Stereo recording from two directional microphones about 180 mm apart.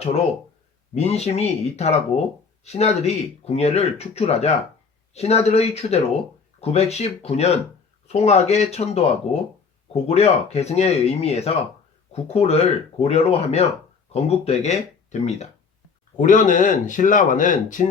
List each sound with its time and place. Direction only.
0.9 s speech: 35° left (ahead or behind)